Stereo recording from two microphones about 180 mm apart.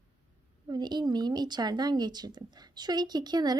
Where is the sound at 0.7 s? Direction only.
25° right (ahead or behind).